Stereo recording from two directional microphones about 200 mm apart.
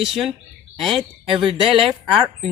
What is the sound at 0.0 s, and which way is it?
Speech, centre (ahead or behind).